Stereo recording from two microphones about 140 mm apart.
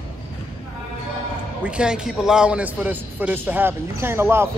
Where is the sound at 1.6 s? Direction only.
5° right (ahead or behind).